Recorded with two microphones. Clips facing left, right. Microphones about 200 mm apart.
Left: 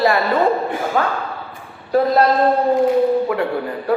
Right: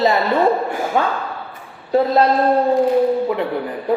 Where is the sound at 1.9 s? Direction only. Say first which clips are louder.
Even; 25° right (ahead or behind).